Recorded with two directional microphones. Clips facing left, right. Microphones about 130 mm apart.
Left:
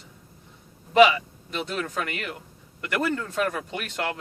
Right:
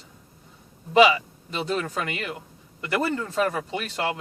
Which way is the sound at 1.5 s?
30° right (ahead or behind).